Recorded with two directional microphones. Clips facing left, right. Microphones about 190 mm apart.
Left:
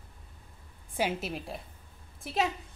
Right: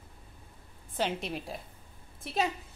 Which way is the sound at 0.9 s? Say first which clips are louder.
Left 1 dB; 5° left (ahead or behind).